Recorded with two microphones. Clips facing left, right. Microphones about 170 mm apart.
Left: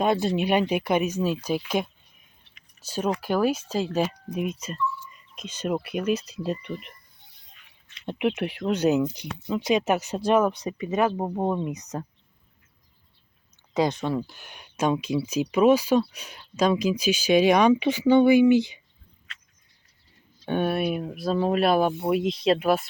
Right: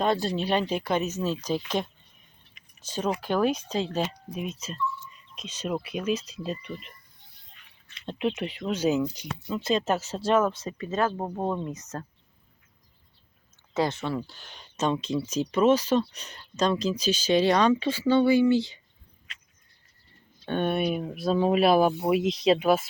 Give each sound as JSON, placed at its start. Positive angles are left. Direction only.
{"t": 0.0, "sound": "speech", "side_deg": 10}
{"t": 8.7, "sound": "speech", "side_deg": 60}
{"t": 9.5, "sound": "speech", "side_deg": 15}
{"t": 13.7, "sound": "speech", "side_deg": 15}
{"t": 20.4, "sound": "speech", "side_deg": 10}